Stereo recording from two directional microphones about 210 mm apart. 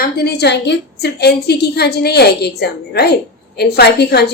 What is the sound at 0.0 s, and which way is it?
A woman's voice, 50° left (ahead or behind).